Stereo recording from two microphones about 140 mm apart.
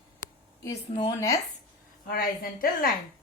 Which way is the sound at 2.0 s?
90° left.